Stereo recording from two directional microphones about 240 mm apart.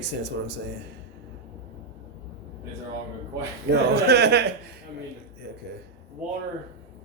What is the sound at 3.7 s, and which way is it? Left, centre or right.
Speech, right.